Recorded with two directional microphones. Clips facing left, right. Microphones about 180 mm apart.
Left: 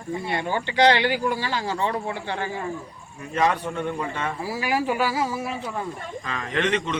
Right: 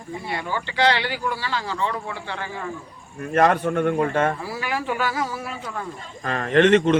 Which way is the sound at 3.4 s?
55° right (ahead or behind).